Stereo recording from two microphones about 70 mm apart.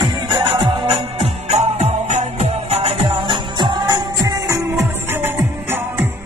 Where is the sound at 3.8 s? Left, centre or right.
Right.